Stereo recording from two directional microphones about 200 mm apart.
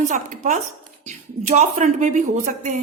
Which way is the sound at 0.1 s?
35° right (ahead or behind).